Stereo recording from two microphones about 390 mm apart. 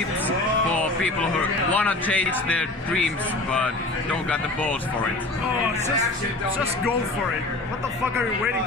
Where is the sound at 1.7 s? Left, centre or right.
Centre.